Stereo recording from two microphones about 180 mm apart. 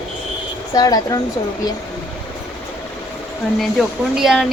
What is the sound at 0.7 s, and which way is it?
Speech, 20° left (ahead or behind).